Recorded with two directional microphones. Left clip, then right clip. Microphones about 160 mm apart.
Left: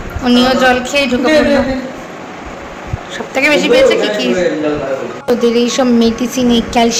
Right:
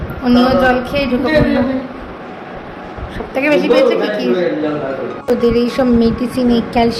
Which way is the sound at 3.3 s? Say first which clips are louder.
Left 2 dB; centre (ahead or behind).